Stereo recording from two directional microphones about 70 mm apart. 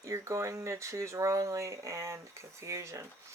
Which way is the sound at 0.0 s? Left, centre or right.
Right.